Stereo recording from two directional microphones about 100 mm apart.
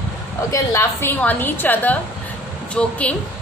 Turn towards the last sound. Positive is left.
turn(degrees=15)  # may be behind; listen again after turning